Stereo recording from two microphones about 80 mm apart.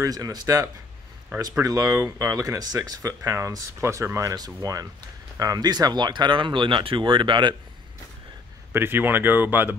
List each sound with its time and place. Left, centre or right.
0.0 s speech: right
8.7 s speech: right